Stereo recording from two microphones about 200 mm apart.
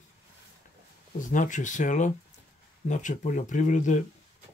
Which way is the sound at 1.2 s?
40° left (ahead or behind).